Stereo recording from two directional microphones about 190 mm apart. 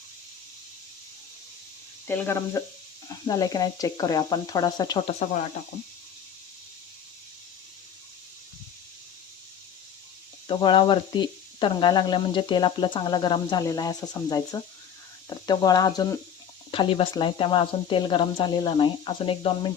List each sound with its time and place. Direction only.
2.0 s speech: 10° left (ahead or behind); by 5.4 s 35° left (ahead or behind)
10.5 s speech: 25° left (ahead or behind)